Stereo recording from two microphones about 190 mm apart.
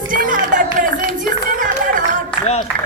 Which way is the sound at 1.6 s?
45° right (ahead or behind).